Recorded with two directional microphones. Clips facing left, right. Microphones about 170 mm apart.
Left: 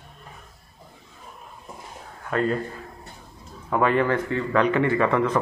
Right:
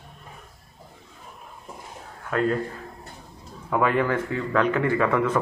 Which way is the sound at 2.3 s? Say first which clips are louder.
Even; centre (ahead or behind).